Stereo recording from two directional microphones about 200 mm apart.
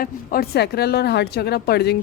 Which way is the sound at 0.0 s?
45° left (ahead or behind).